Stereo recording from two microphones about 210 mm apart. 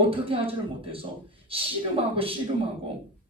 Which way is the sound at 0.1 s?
25° right (ahead or behind).